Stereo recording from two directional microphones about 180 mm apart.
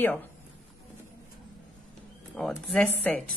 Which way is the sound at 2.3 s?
Centre (ahead or behind).